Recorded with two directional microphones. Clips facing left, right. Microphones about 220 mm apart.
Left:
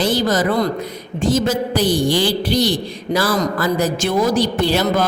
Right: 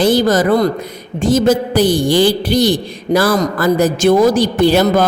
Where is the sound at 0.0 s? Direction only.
50° right (ahead or behind).